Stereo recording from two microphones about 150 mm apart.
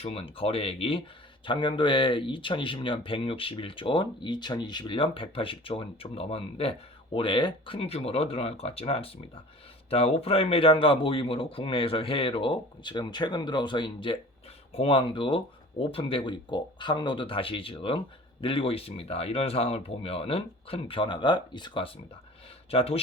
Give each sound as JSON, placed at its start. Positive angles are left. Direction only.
{"t": 0.0, "sound": "speech", "side_deg": 40}